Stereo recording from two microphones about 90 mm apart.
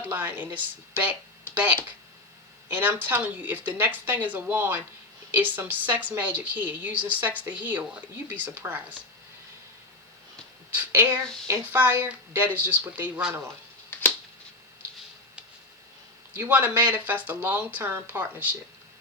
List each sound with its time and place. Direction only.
0.1 s speech: 20° right (ahead or behind)
8.6 s speech: 35° right (ahead or behind)
10.8 s speech: 20° right (ahead or behind)
16.3 s speech: 20° right (ahead or behind)